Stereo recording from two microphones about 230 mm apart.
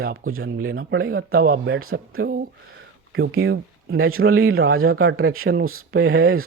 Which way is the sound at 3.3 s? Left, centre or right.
Right.